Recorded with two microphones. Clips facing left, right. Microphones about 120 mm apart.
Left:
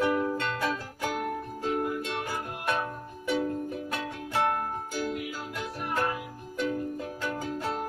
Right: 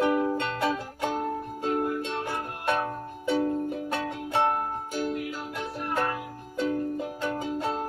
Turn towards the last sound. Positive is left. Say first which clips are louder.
# right 3 dB
turn(degrees=-25)  # may be behind; listen again after turning